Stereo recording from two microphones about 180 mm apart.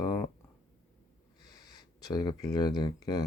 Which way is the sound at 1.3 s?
20° left (ahead or behind).